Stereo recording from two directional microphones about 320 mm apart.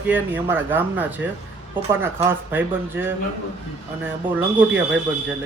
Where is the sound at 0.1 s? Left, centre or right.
Centre.